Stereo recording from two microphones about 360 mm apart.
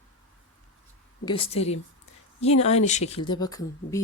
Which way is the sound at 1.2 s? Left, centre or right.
Centre.